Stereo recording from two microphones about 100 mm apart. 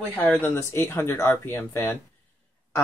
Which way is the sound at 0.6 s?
25° left (ahead or behind).